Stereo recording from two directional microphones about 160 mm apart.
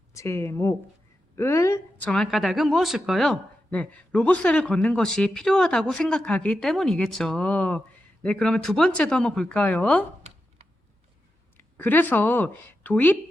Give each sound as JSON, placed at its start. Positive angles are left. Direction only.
{"t": 0.1, "sound": "a woman's voice", "side_deg": 20}
{"t": 2.0, "sound": "speech", "side_deg": 0}
{"t": 11.5, "sound": "a woman's voice", "side_deg": 10}